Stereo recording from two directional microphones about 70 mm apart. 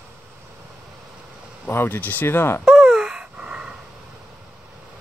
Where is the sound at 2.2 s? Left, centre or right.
Left.